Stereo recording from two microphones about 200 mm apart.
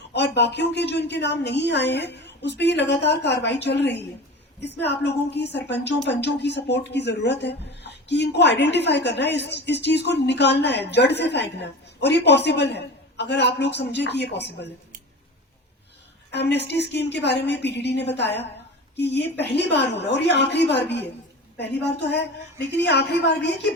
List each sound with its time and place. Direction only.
0.1 s speech: 60° left (ahead or behind)
16.3 s speech: 55° left (ahead or behind)
19.5 s speech: 60° left (ahead or behind)
22.1 s speech: 55° left (ahead or behind)